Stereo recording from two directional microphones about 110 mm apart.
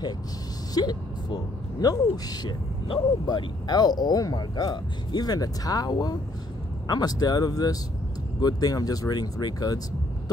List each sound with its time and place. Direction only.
0.7 s speech: 40° left (ahead or behind)